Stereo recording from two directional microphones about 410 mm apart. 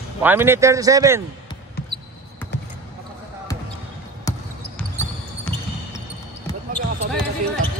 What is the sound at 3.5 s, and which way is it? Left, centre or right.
Basketball bounce, centre.